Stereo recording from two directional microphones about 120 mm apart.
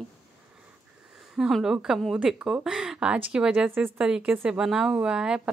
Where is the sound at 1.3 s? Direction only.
5° right (ahead or behind).